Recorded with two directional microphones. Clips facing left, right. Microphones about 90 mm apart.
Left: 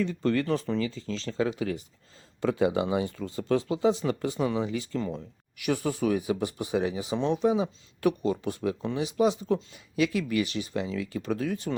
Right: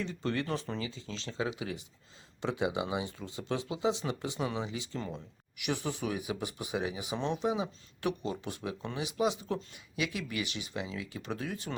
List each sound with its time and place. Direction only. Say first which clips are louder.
0.0 s speech: left 7 dB; 45° left (ahead or behind)